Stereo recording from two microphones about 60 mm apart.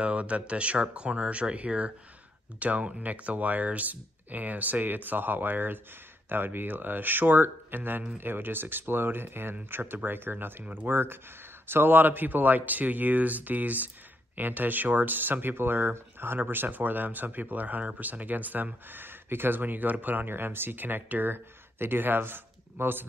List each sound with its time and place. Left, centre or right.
0.0 s speech: right